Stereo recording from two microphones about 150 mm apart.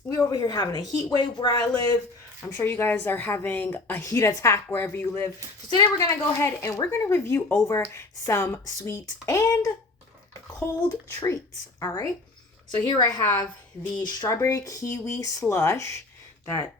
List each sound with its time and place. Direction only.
0.3 s a woman's voice: 30° left (ahead or behind)
10.8 s speech: 20° left (ahead or behind)